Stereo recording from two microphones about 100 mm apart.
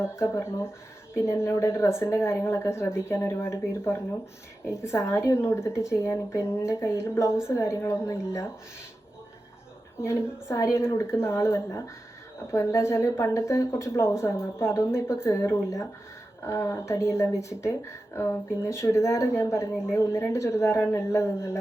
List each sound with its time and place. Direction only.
0.0 s speech: 25° left (ahead or behind)
10.0 s speech: 25° left (ahead or behind)